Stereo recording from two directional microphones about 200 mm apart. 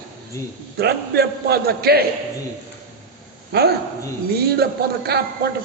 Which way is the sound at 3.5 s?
55° right (ahead or behind).